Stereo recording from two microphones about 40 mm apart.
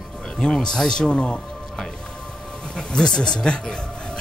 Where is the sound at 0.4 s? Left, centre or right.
Left.